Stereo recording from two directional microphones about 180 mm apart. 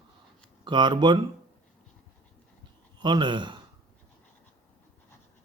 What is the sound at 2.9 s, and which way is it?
Speech, 25° right (ahead or behind).